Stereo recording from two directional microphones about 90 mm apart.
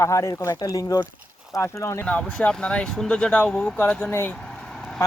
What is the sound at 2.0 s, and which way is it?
Speech, 15° left (ahead or behind).